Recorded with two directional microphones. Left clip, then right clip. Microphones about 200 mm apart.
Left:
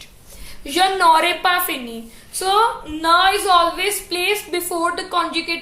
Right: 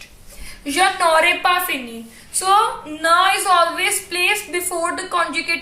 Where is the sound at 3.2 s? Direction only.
50° left (ahead or behind).